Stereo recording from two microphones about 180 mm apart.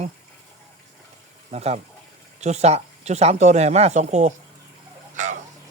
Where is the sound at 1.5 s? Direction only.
35° right (ahead or behind).